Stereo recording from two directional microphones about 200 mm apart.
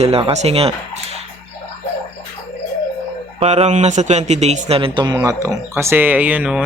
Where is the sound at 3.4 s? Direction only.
35° right (ahead or behind).